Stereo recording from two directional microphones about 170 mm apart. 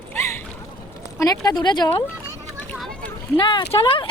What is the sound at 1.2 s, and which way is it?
Speech, 20° left (ahead or behind).